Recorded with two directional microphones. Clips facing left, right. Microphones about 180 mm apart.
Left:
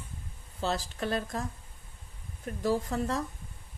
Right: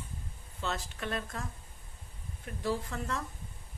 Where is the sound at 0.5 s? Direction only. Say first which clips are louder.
Left 5 dB; 35° left (ahead or behind).